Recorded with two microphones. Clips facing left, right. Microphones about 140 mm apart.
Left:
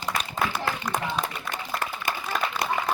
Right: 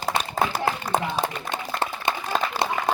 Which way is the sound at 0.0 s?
35° right (ahead or behind).